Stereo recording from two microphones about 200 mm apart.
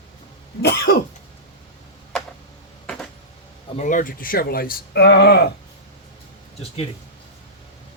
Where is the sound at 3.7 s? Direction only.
40° left (ahead or behind); by 5.5 s 55° left (ahead or behind).